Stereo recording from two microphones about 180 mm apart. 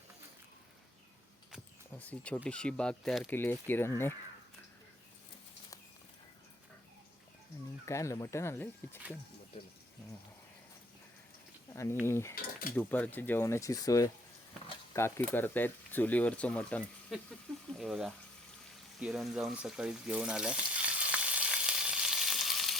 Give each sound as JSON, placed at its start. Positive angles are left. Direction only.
{"t": 2.0, "sound": "speech", "side_deg": 5}
{"t": 7.9, "sound": "speech", "side_deg": 15}
{"t": 11.7, "sound": "speech", "side_deg": 15}
{"t": 12.3, "sound": "mechanisms", "side_deg": 55}
{"t": 12.7, "sound": "speech", "side_deg": 10}
{"t": 18.9, "sound": "frying", "side_deg": 0}